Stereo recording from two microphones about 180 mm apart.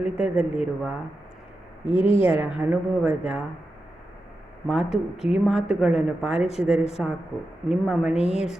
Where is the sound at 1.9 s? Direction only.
30° left (ahead or behind).